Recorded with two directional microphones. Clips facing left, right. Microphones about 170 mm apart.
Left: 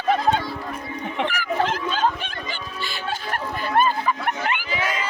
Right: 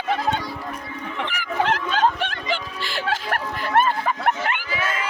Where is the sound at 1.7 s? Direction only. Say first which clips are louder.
Right 2 dB; 75° right (ahead or behind).